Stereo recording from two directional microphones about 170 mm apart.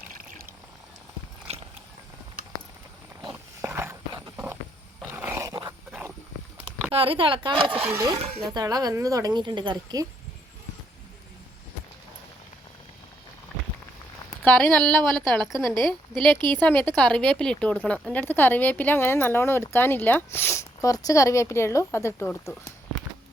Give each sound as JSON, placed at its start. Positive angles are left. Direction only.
{"t": 0.1, "sound": "pour", "side_deg": -55}
{"t": 1.5, "sound": "walk", "side_deg": -40}
{"t": 3.3, "sound": "wild animals", "side_deg": -15}
{"t": 5.0, "sound": "dog", "side_deg": -10}
{"t": 6.9, "sound": "speech", "side_deg": -30}
{"t": 7.7, "sound": "speech", "side_deg": -10}
{"t": 8.4, "sound": "speech", "side_deg": -20}
{"t": 14.4, "sound": "a woman's voice", "side_deg": 10}
{"t": 15.7, "sound": "speech", "side_deg": -25}
{"t": 16.6, "sound": "speech", "side_deg": 10}